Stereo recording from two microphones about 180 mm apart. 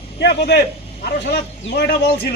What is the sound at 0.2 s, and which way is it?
Speech, 70° left (ahead or behind).